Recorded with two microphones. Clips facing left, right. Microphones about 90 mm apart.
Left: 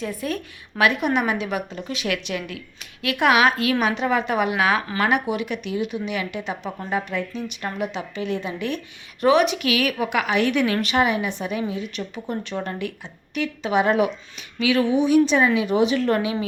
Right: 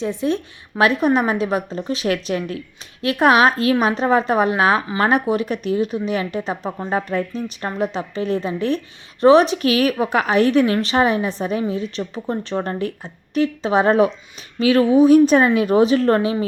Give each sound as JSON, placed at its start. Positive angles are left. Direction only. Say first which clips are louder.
{"t": 0.0, "sound": "a woman's voice", "louder": "right 6 dB", "side_deg": -25}